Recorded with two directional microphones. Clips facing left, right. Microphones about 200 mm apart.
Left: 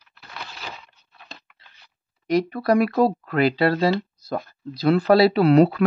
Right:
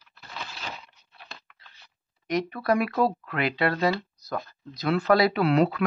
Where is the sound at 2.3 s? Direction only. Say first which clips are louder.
Left 5 dB; 35° left (ahead or behind).